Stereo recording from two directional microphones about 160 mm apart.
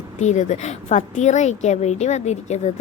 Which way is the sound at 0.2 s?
45° left (ahead or behind).